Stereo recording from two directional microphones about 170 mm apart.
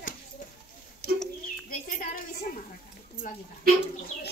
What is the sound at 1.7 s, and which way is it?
Speech, 50° left (ahead or behind).